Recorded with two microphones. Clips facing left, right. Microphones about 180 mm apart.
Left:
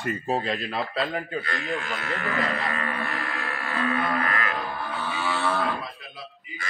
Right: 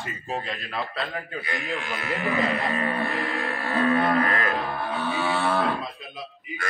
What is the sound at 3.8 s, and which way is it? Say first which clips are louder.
Livestock: right 5 dB; 40° right (ahead or behind).